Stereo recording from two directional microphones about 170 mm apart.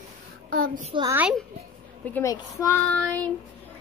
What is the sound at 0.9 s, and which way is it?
Speech, 30° right (ahead or behind).